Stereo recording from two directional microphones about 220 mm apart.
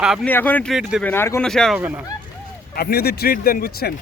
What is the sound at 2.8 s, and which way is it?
Speech, 45° left (ahead or behind).